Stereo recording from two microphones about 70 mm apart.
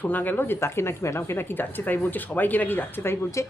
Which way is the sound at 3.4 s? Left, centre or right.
Left.